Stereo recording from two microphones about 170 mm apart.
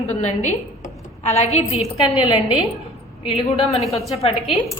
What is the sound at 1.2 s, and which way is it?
Speech, 40° left (ahead or behind).